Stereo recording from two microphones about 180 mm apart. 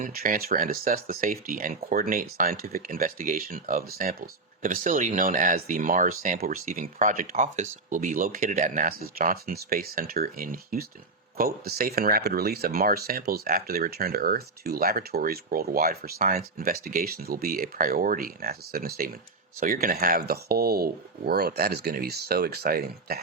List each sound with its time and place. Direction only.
0.0 s speech: 50° right (ahead or behind)